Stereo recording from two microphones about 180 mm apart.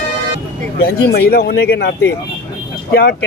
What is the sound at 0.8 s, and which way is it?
Speech, 60° left (ahead or behind).